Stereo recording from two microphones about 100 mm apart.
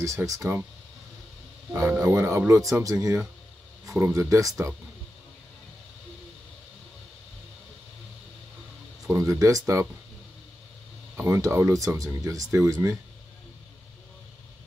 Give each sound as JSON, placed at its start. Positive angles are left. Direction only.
{"t": 0.0, "sound": "speech", "side_deg": -30}
{"t": 1.8, "sound": "speech", "side_deg": -30}
{"t": 9.1, "sound": "speech", "side_deg": -30}
{"t": 11.1, "sound": "speech", "side_deg": -30}